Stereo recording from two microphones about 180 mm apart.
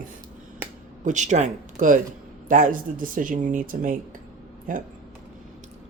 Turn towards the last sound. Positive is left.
turn(degrees=-50)  # may be behind; listen again after turning